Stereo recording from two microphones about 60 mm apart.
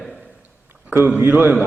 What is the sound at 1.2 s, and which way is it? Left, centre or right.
Speech, right.